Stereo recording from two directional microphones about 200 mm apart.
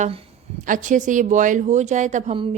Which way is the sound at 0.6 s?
40° right (ahead or behind).